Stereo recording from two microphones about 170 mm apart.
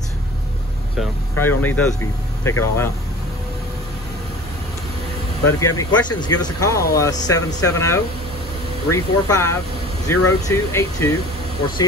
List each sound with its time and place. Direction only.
1.4 s speech: 10° left (ahead or behind)
5.4 s speech: 15° left (ahead or behind)